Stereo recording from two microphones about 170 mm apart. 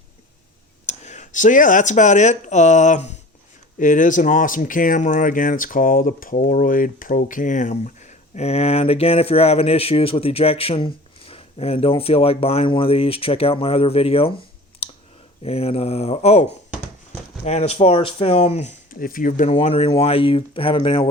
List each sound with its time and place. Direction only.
0.9 s speech: 45° left (ahead or behind)
8.4 s speech: 35° left (ahead or behind)
14.8 s clicking: 35° left (ahead or behind)
15.4 s speech: 35° left (ahead or behind)
18.9 s speech: 55° left (ahead or behind)
19.5 s speech: 35° left (ahead or behind)